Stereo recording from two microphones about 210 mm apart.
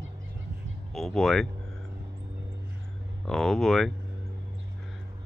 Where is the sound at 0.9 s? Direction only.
Centre (ahead or behind).